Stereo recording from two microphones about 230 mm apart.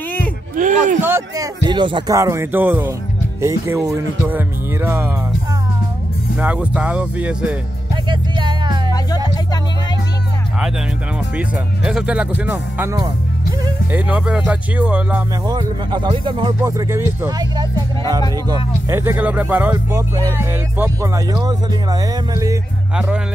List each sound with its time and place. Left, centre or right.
0.6 s a sound: right
1.0 s speech: centre
6.3 s speech: centre
7.9 s music: right
9.3 s music: centre
11.1 s speech: centre
15.5 s speech: centre
18.9 s speech: centre
22.9 s speech: centre